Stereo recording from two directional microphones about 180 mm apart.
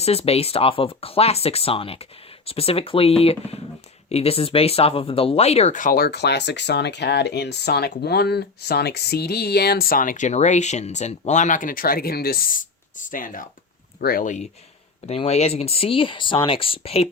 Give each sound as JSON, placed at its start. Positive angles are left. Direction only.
{"t": 0.0, "sound": "speech", "side_deg": 35}
{"t": 15.0, "sound": "speech", "side_deg": 35}